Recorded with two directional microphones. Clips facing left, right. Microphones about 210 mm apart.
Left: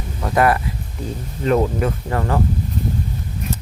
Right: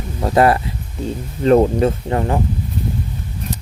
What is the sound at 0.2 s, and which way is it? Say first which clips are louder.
Speech: right 3 dB; 30° right (ahead or behind).